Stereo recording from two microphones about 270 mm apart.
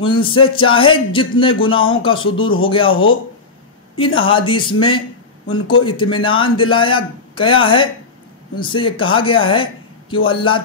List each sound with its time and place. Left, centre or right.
0.0 s speech: centre
2.4 s speech: left
3.9 s speech: centre